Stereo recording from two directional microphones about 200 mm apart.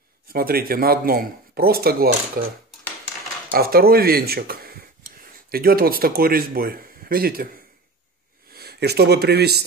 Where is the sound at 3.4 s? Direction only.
50° right (ahead or behind).